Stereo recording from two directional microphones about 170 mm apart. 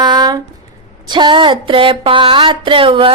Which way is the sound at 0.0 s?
25° right (ahead or behind).